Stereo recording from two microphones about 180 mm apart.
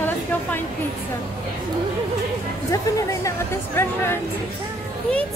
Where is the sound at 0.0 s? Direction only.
10° left (ahead or behind).